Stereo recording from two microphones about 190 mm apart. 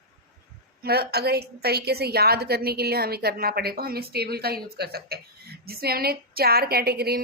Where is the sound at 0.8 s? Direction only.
55° right (ahead or behind).